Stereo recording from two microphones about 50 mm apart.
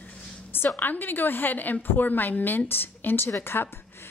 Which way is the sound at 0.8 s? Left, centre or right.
Left.